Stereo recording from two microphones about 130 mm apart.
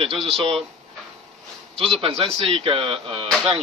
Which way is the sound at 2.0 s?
50° right (ahead or behind).